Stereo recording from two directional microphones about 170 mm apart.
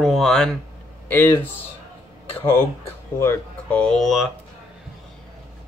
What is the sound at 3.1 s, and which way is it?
Speech, 15° left (ahead or behind).